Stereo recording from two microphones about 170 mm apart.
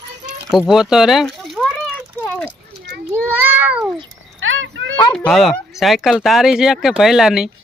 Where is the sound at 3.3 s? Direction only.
10° right (ahead or behind).